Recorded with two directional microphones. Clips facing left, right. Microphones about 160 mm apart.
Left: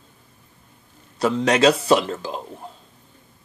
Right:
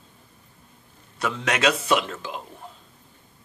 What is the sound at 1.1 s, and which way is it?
Speech, 35° left (ahead or behind).